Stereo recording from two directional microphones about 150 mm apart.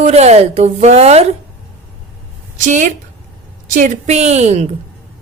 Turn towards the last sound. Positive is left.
turn(degrees=-45)  # may be behind; listen again after turning